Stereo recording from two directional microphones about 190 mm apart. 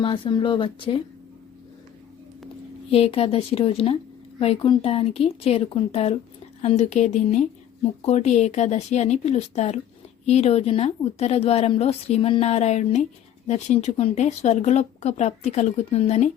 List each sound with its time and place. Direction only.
0.0 s speech: 25° left (ahead or behind)
2.9 s speech: 30° left (ahead or behind)